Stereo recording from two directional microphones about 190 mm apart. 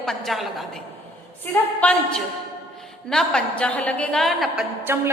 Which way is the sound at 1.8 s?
5° left (ahead or behind).